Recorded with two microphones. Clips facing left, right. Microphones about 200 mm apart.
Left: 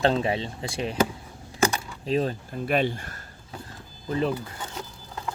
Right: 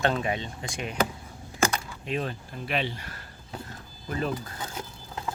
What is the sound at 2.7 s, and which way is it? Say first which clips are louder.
Speech: left 6 dB; 50° left (ahead or behind).